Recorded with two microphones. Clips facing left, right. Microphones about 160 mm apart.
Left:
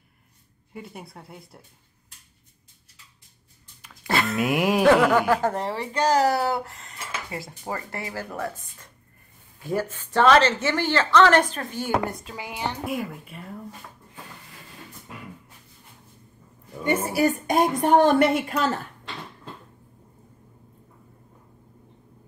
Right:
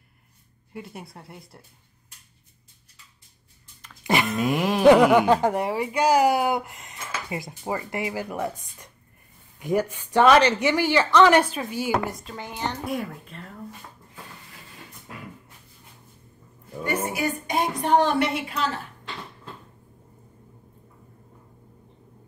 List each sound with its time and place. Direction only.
0.7 s speech: centre (ahead or behind)
4.0 s a sound: 15° right (ahead or behind)
4.4 s music: 10° left (ahead or behind)
4.8 s a woman's voice: 15° right (ahead or behind); by 13.5 s 10° left (ahead or behind)
17.1 s a woman's voice: 45° left (ahead or behind)